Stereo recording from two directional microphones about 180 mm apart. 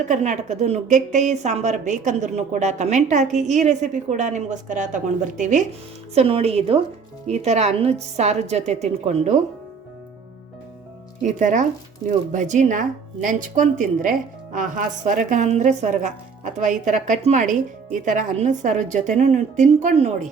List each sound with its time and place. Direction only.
0.1 s a woman's voice: 40° right (ahead or behind)
11.3 s speech: 45° right (ahead or behind)